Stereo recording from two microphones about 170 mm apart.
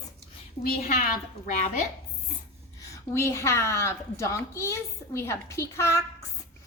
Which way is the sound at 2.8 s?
20° left (ahead or behind).